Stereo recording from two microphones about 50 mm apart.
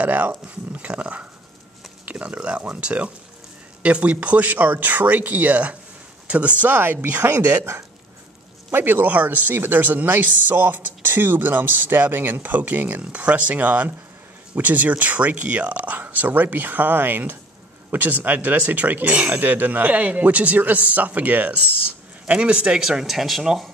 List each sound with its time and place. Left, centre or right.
0.0 s speech: right
8.7 s speech: right; by 22.8 s centre
22.8 s speech: centre